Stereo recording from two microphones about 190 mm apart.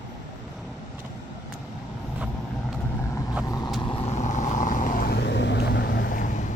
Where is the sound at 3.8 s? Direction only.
30° left (ahead or behind); by 6.2 s 60° left (ahead or behind).